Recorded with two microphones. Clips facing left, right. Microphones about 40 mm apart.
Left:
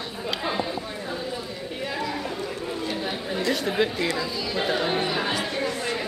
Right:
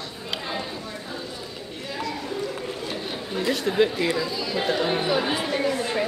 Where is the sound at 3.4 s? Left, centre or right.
Centre.